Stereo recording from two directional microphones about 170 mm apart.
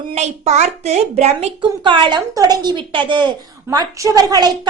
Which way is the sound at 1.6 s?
30° right (ahead or behind).